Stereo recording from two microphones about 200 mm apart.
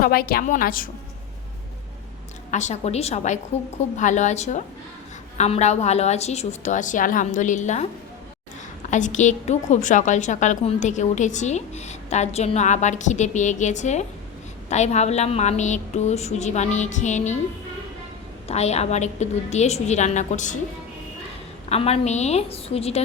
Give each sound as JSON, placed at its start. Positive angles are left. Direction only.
{"t": 0.0, "sound": "a woman's voice", "side_deg": 50}
{"t": 2.5, "sound": "a woman's voice", "side_deg": 35}
{"t": 8.9, "sound": "a woman's voice", "side_deg": 40}
{"t": 18.4, "sound": "a woman's voice", "side_deg": 30}
{"t": 21.7, "sound": "a woman's voice", "side_deg": 30}